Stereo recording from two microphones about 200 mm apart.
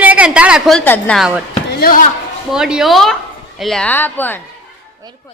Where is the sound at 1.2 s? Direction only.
5° right (ahead or behind).